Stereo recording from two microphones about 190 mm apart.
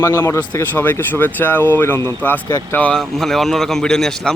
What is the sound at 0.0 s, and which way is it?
Speech, 15° left (ahead or behind).